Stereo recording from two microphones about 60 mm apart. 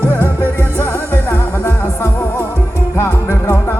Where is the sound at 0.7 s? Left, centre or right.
Left.